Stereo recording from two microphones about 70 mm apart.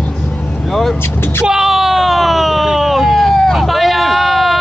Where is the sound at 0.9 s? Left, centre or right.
Left.